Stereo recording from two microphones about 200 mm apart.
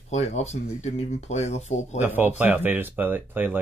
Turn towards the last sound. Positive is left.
turn(degrees=-10)  # may be behind; listen again after turning